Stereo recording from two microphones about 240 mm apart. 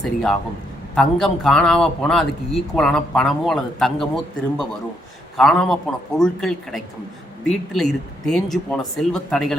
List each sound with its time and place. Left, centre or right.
0.0 s a man's voice: centre